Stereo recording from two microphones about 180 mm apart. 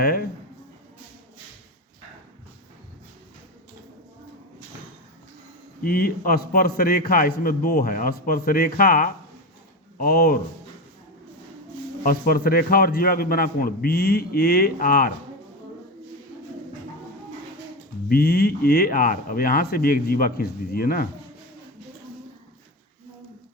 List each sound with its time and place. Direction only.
0.0 s a man's voice: 55° left (ahead or behind)
5.8 s a man's voice: 55° left (ahead or behind)
12.0 s a man's voice: 55° left (ahead or behind)
18.1 s a man's voice: 55° left (ahead or behind)